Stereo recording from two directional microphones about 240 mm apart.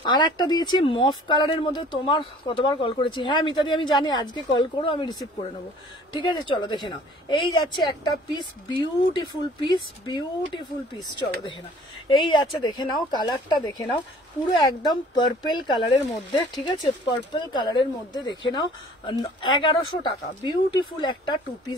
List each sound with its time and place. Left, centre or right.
0.0 s speech: centre